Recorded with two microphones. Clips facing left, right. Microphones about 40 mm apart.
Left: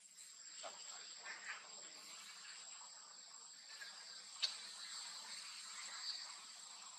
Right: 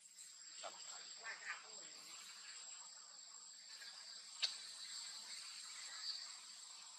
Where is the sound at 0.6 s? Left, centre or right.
Centre.